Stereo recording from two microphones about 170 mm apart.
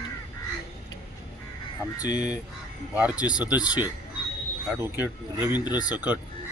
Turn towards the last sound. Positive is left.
turn(degrees=-10)  # may be behind; listen again after turning